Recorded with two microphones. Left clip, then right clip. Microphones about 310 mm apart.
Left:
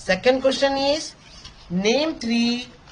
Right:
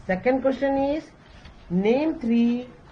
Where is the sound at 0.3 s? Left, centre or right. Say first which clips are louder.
Left 4 dB; left.